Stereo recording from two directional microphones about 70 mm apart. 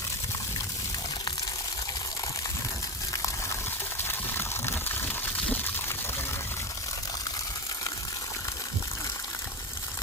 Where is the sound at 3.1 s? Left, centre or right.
Left.